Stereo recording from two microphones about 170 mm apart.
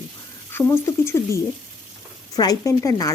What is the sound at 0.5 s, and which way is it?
A woman's voice, 15° left (ahead or behind).